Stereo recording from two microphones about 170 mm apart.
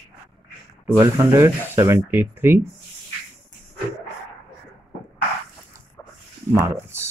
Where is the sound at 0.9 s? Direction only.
15° right (ahead or behind).